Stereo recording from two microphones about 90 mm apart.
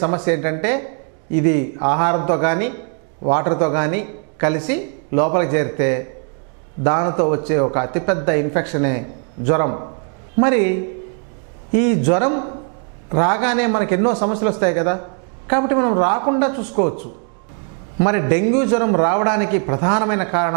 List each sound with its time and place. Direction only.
0.0 s a woman's voice: 20° right (ahead or behind)